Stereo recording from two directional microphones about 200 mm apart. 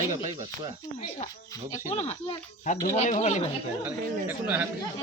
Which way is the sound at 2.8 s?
40° left (ahead or behind).